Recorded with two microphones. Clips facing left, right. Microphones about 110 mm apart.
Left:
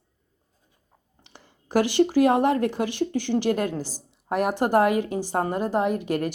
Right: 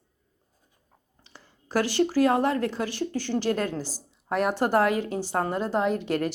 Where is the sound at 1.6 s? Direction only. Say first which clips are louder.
Left 4 dB; 15° left (ahead or behind).